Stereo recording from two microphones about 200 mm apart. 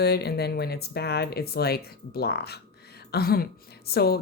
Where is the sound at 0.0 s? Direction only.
55° left (ahead or behind).